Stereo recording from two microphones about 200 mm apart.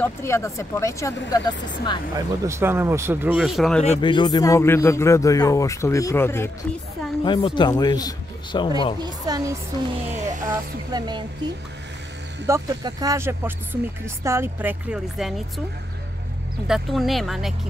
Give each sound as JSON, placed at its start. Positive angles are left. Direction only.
{"t": 0.0, "sound": "speech", "side_deg": 15}
{"t": 2.1, "sound": "speech", "side_deg": -15}
{"t": 3.8, "sound": "speech", "side_deg": 30}
{"t": 7.2, "sound": "speech", "side_deg": 25}
{"t": 9.0, "sound": "speech", "side_deg": -20}
{"t": 10.0, "sound": "music", "side_deg": -35}
{"t": 10.5, "sound": "speech", "side_deg": -20}
{"t": 12.4, "sound": "speech", "side_deg": -15}
{"t": 16.6, "sound": "speech", "side_deg": 0}